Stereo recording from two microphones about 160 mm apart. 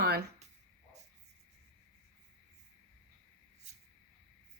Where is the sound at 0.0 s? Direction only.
90° right.